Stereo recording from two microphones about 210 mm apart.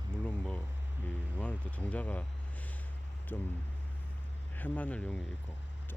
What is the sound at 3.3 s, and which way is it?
Speech, 10° left (ahead or behind).